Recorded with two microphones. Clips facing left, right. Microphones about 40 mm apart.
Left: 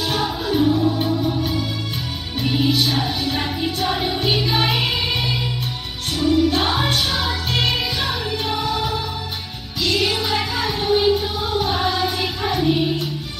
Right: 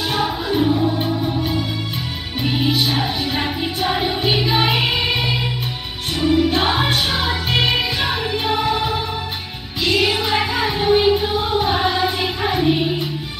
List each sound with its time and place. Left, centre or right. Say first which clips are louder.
0.1 s music: right 2 dB; centre